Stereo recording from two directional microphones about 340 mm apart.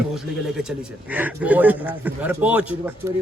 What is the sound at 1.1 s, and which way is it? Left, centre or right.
Speech, centre.